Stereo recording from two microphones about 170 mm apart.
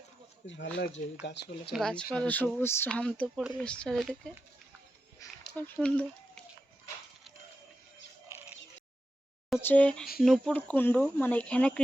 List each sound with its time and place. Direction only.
0.4 s speech: 90° left
1.7 s speech: 5° left (ahead or behind)
5.2 s a sound: 20° left (ahead or behind)
5.5 s speech: 10° left (ahead or behind)
9.6 s speech: 10° left (ahead or behind)